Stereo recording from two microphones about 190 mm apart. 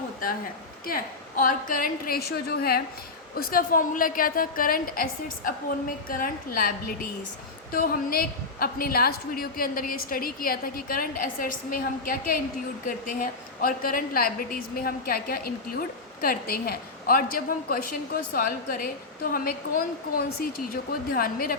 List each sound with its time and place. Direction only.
0.9 s a woman's voice: 50° left (ahead or behind)